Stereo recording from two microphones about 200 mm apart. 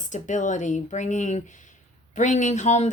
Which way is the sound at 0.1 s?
40° left (ahead or behind).